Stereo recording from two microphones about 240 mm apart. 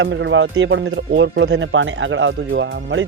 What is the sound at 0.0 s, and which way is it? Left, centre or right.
Speech, right.